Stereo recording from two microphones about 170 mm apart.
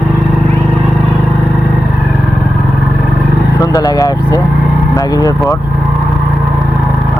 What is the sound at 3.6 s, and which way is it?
Speech, 20° left (ahead or behind).